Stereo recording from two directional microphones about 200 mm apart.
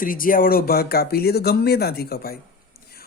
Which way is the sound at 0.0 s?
45° left (ahead or behind).